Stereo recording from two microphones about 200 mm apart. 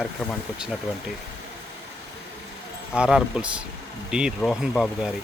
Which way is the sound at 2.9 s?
5° right (ahead or behind).